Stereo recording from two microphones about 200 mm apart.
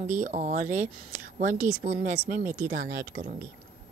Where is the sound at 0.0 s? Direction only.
40° right (ahead or behind).